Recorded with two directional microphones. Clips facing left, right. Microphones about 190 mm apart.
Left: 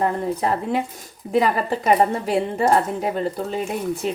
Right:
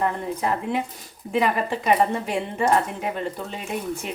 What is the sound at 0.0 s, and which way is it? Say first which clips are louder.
Speech: left 3 dB; 35° left (ahead or behind).